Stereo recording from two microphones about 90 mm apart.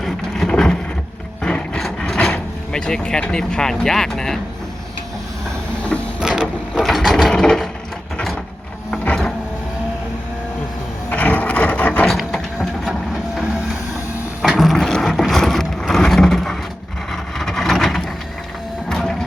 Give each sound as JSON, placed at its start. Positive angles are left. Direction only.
{"t": 0.0, "sound": "vehicle", "side_deg": 5}
{"t": 1.4, "sound": "a sound", "side_deg": 10}
{"t": 2.2, "sound": "speech", "side_deg": 5}
{"t": 6.1, "sound": "mechanisms", "side_deg": -10}
{"t": 6.8, "sound": "ratchet", "side_deg": 0}
{"t": 9.0, "sound": "a sound", "side_deg": 5}
{"t": 11.1, "sound": "wood", "side_deg": 20}
{"t": 12.0, "sound": "a sound", "side_deg": 5}
{"t": 14.4, "sound": "vehicle", "side_deg": -5}
{"t": 18.9, "sound": "printer", "side_deg": 5}